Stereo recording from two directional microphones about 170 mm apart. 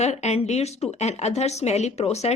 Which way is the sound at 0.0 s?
40° left (ahead or behind).